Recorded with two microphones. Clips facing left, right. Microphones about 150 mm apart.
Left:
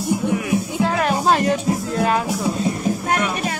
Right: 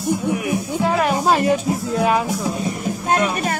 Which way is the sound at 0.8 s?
5° right (ahead or behind).